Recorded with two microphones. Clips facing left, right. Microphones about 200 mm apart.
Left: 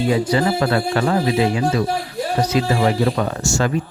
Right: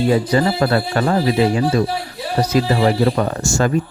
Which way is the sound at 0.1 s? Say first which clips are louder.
Right 2 dB; 40° right (ahead or behind).